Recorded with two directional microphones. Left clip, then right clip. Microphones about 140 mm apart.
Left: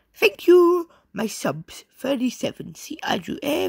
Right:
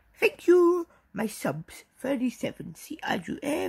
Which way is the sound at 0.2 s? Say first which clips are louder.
Left 6 dB; 25° left (ahead or behind).